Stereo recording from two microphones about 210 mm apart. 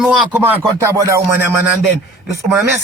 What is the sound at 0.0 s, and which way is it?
Speech, 5° right (ahead or behind).